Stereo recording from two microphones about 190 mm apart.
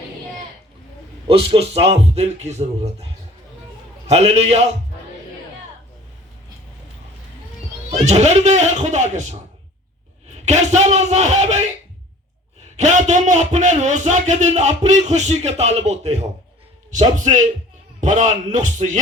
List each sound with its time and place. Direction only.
1.3 s a man's voice: 30° right (ahead or behind)
7.9 s a man's voice: 35° right (ahead or behind)
10.4 s a man's voice: 35° right (ahead or behind)
12.7 s a man's voice: 40° right (ahead or behind)